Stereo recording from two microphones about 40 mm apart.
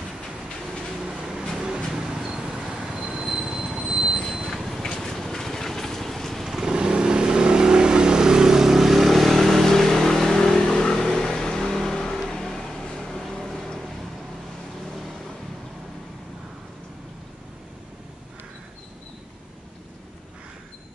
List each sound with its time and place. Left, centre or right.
1.0 s vehicle: centre
1.9 s a sound: centre
2.5 s vehicle: centre
2.9 s train wheels squealing: right
4.1 s train: centre
4.8 s a sound: centre
6.4 s vehicle: centre